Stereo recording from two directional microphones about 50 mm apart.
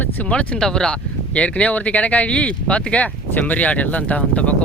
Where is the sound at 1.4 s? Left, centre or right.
Left.